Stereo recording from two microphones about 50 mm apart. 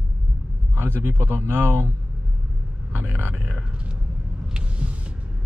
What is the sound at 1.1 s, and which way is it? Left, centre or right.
Speech, right.